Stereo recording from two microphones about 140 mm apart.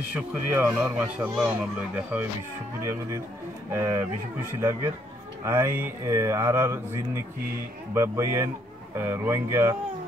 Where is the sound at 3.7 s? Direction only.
20° right (ahead or behind).